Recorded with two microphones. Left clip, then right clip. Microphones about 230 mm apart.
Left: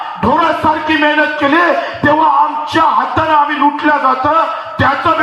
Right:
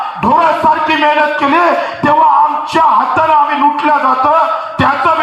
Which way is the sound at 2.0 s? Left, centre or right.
Right.